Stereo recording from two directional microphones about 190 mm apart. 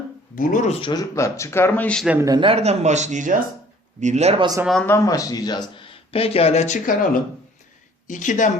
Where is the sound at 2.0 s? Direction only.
15° right (ahead or behind); by 4.4 s 35° right (ahead or behind).